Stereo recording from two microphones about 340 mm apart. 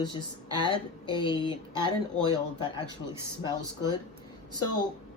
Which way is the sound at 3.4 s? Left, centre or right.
Centre.